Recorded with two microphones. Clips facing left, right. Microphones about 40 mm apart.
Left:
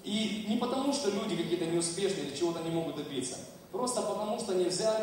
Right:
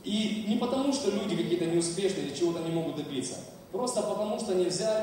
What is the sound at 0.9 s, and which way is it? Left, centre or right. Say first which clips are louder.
A man's voice: right 3 dB; centre.